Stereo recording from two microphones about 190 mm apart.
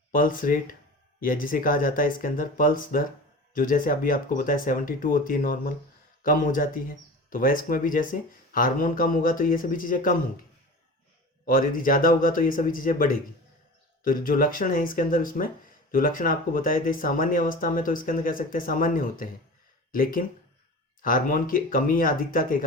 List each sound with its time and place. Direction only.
0.1 s speech: 45° left (ahead or behind)
11.4 s speech: 45° left (ahead or behind)